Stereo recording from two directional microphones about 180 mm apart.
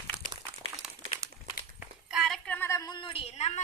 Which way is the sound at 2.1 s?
Centre (ahead or behind).